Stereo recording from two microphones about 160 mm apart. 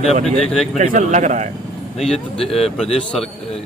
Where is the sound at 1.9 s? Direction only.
Centre (ahead or behind).